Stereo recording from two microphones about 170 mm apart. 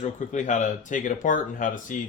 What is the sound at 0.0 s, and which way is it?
Speech, 45° left (ahead or behind).